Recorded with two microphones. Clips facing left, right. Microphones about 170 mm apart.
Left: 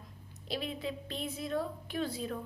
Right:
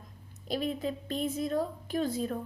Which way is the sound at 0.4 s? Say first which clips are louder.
Right 5 dB; 45° right (ahead or behind).